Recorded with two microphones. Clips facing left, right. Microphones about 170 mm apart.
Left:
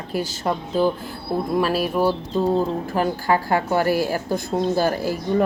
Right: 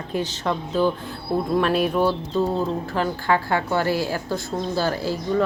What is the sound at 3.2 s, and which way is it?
Speech, 40° left (ahead or behind).